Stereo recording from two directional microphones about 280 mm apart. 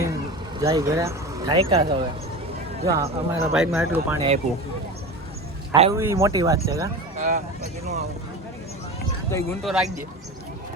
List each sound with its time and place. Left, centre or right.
0.6 s speech: centre
5.9 s speech: centre
7.2 s speech: right
9.3 s speech: centre